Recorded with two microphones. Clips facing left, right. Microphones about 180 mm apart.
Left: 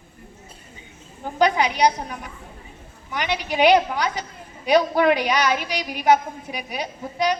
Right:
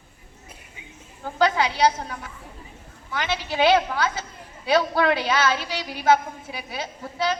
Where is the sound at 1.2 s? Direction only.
20° left (ahead or behind).